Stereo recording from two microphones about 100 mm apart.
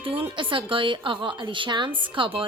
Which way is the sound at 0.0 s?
65° right (ahead or behind).